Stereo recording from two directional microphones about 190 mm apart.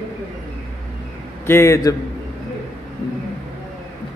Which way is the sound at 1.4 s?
15° left (ahead or behind).